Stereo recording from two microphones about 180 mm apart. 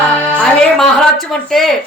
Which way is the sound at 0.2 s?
5° left (ahead or behind).